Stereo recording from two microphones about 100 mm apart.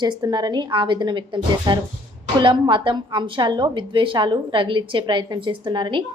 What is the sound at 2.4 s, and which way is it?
A woman's voice, 55° right (ahead or behind).